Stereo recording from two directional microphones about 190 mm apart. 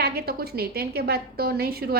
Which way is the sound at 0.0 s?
55° right (ahead or behind).